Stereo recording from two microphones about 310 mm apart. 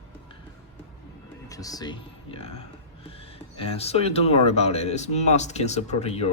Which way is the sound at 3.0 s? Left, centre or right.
Centre.